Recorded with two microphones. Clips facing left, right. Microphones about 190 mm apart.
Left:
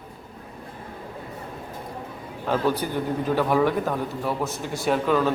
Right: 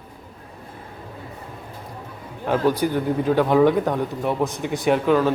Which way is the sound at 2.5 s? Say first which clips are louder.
Right 4 dB; 10° right (ahead or behind).